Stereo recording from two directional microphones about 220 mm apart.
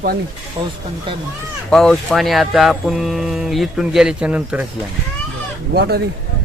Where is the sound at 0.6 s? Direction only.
25° right (ahead or behind).